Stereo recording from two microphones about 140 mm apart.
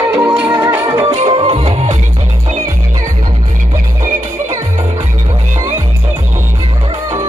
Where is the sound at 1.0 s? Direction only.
40° right (ahead or behind).